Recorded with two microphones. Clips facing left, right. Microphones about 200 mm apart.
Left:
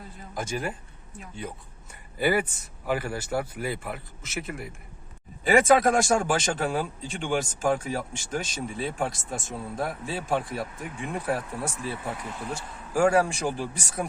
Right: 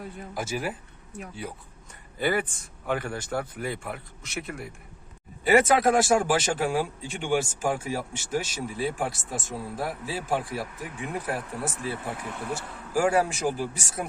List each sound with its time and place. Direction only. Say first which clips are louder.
0.3 s speech: even; 5° right (ahead or behind)
2.1 s speech: left 2 dB; 10° left (ahead or behind)
12.3 s speech: right 1 dB; 55° right (ahead or behind)
12.9 s speech: left 2 dB; 5° right (ahead or behind)